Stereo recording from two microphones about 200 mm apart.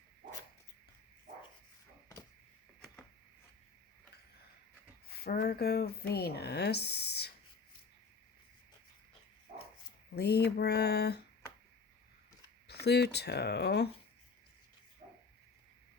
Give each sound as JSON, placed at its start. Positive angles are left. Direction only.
{"t": 5.0, "sound": "speech", "side_deg": 50}
{"t": 10.2, "sound": "speech", "side_deg": 55}
{"t": 12.6, "sound": "speech", "side_deg": 55}